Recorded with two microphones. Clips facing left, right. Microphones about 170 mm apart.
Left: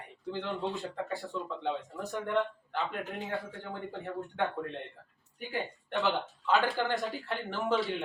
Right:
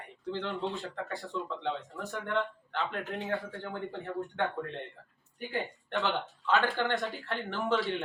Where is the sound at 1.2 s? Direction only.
Centre (ahead or behind).